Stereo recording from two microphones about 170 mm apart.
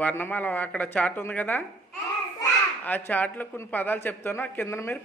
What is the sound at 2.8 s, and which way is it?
A man's voice, 10° left (ahead or behind).